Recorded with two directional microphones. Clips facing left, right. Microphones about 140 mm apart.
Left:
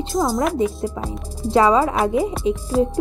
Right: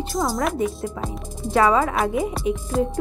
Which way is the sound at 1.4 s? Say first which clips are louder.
Left 3 dB; 25° left (ahead or behind).